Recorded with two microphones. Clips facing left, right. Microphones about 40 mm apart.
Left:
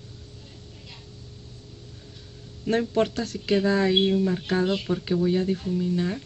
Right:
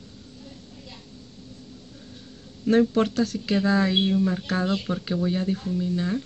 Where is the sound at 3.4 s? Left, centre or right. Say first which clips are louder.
Left 3 dB; centre.